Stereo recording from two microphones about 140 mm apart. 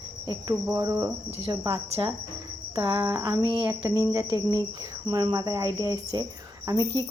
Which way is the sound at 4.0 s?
25° right (ahead or behind).